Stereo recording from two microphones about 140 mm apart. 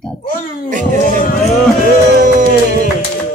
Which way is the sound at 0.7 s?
65° right (ahead or behind).